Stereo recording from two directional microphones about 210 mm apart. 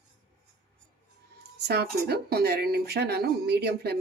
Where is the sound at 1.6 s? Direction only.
50° right (ahead or behind).